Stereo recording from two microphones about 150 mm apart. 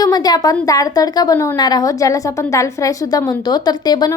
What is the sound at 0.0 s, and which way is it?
A woman's voice, 25° left (ahead or behind).